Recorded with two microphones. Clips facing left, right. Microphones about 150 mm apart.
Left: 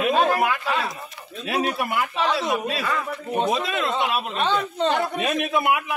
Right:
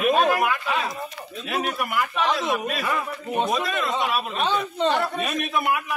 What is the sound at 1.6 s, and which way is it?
Speech, 25° left (ahead or behind).